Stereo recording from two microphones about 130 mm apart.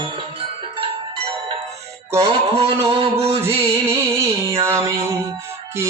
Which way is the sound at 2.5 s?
50° right (ahead or behind).